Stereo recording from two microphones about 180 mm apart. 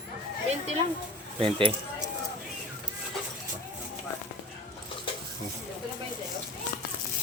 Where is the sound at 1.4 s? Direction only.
30° right (ahead or behind).